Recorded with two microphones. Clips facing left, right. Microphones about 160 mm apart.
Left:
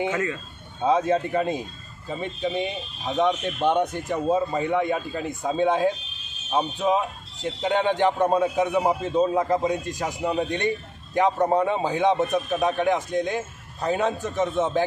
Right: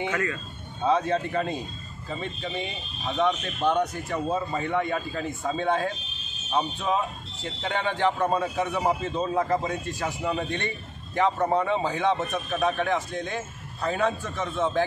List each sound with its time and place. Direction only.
0.1 s speech: 20° left (ahead or behind)
0.8 s a man's voice: 10° left (ahead or behind)